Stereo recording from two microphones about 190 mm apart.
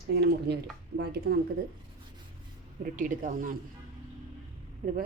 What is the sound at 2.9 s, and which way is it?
Speech, 45° right (ahead or behind).